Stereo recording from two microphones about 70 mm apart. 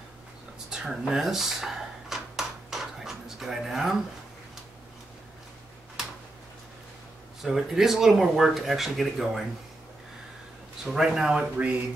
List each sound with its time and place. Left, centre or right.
0.7 s a sound: centre
7.4 s speech: centre
10.9 s speech: centre
11.5 s speech: centre